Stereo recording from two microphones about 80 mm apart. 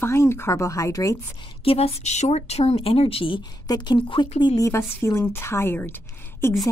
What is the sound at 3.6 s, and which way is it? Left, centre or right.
Speech, left.